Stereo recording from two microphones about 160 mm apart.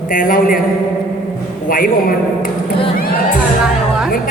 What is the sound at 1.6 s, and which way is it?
Speech, 60° left (ahead or behind).